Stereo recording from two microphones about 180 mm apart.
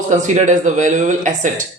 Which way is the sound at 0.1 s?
45° right (ahead or behind).